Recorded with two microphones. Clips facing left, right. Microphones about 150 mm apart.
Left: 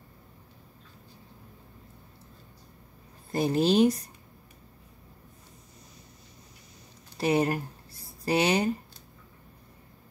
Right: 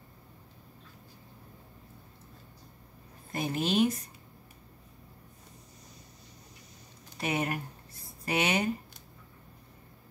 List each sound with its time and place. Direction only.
3.3 s speech: 35° left (ahead or behind)
7.2 s speech: 35° left (ahead or behind)